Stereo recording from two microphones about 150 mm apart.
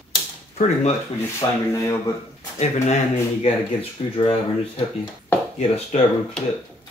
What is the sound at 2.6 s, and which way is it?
Speech, 50° left (ahead or behind).